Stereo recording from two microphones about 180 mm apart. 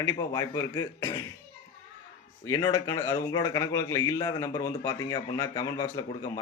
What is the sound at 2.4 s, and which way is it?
Speech, 20° left (ahead or behind).